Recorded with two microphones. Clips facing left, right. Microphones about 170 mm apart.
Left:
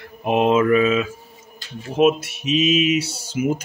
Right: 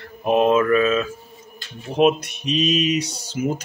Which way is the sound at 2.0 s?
5° left (ahead or behind).